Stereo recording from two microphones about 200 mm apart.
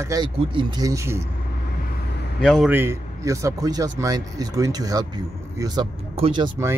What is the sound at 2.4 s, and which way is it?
Speech, 5° left (ahead or behind).